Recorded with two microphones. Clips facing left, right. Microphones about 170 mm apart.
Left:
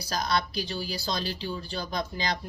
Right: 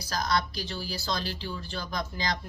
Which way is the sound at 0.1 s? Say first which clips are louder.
Even; 25° left (ahead or behind).